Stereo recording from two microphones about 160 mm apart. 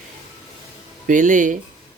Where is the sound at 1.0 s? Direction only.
50° right (ahead or behind).